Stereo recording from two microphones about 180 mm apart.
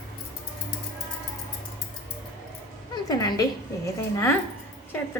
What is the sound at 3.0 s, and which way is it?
Speech, 20° left (ahead or behind).